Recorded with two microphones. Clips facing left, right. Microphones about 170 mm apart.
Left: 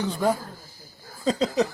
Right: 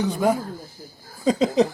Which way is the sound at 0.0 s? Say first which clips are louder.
Right 3 dB; 15° right (ahead or behind).